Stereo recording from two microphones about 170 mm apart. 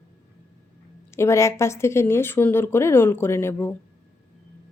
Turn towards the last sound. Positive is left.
turn(degrees=15)  # may be behind; listen again after turning